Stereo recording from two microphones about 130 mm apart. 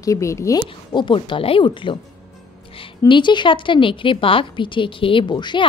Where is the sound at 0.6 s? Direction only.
40° left (ahead or behind).